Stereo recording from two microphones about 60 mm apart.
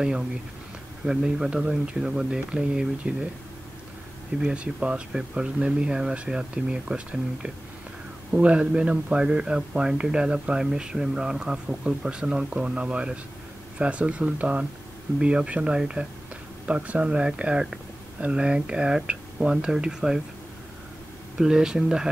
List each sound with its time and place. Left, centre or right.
1.0 s speech: centre
4.4 s speech: centre
21.4 s speech: centre